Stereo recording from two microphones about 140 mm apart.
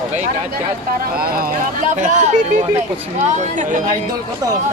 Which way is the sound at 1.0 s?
90° right.